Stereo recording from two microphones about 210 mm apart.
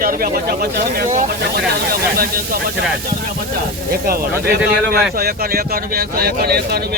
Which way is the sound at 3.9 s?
45° right (ahead or behind).